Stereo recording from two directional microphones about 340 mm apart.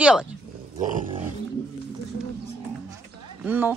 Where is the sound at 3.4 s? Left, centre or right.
Centre.